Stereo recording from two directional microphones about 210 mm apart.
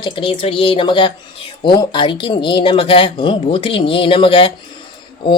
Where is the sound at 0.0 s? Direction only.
25° left (ahead or behind).